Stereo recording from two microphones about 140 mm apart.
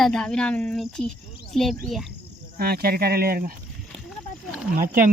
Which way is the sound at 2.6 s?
90° right.